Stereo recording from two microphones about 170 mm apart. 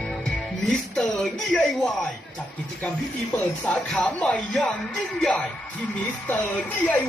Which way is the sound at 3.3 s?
10° left (ahead or behind).